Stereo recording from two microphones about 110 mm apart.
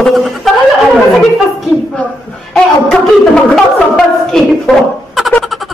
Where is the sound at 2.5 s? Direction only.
5° left (ahead or behind).